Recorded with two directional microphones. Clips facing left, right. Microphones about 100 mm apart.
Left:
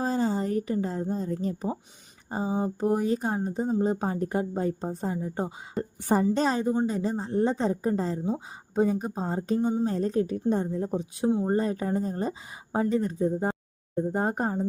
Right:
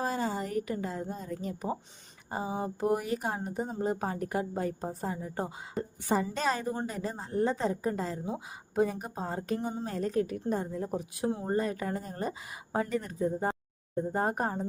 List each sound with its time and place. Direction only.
0.0 s a woman's voice: 25° left (ahead or behind)